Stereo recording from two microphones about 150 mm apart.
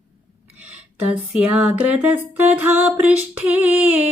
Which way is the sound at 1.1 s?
10° right (ahead or behind).